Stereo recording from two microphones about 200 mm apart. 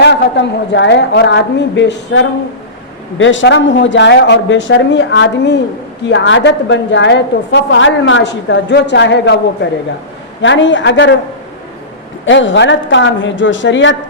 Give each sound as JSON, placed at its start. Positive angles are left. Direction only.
{"t": 0.0, "sound": "a woman's voice", "side_deg": 60}
{"t": 10.4, "sound": "a woman's voice", "side_deg": 65}
{"t": 12.2, "sound": "a woman's voice", "side_deg": 70}